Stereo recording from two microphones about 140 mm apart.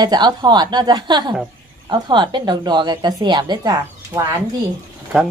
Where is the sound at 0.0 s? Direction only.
30° right (ahead or behind).